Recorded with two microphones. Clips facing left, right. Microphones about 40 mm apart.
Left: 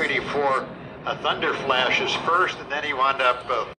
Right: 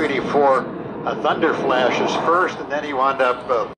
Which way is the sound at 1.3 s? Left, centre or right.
Left.